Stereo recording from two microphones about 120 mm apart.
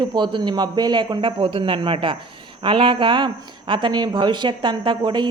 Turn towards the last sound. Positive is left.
turn(degrees=-40)  # may be behind; listen again after turning